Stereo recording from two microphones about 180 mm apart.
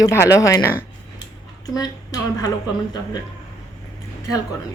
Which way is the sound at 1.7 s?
20° left (ahead or behind).